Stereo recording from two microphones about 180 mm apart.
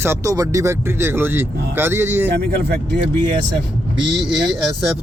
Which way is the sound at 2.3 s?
65° right (ahead or behind).